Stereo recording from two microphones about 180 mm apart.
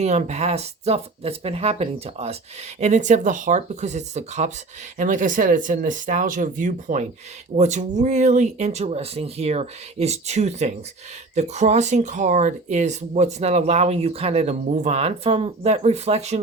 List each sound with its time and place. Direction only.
0.0 s speech: 40° right (ahead or behind)